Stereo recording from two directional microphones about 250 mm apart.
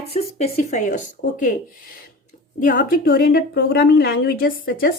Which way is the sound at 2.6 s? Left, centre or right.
Left.